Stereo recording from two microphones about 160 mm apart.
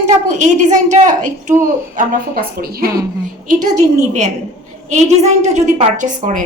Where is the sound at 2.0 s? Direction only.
65° right (ahead or behind).